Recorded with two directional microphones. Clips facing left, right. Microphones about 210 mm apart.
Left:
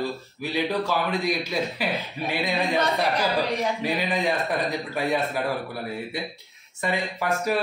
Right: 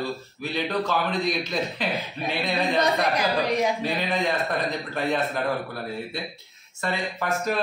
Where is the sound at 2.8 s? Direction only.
15° right (ahead or behind).